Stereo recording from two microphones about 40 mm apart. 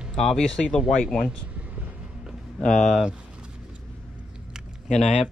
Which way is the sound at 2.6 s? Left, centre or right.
Centre.